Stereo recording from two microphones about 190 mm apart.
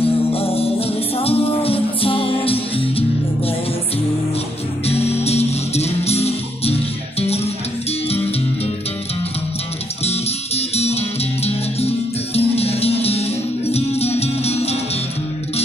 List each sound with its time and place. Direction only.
0.0 s music: 30° left (ahead or behind)
4.8 s music: 30° left (ahead or behind)
10.0 s music: 35° left (ahead or behind)